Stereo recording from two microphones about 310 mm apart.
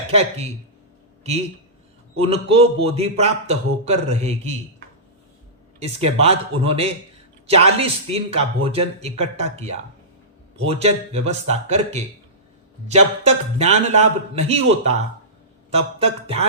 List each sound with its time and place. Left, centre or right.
0.1 s a man's voice: right
2.1 s a man's voice: centre
6.0 s a man's voice: centre
10.6 s a man's voice: centre